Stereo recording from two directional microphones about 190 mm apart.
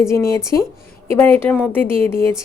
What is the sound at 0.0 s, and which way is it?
Speech, 15° left (ahead or behind).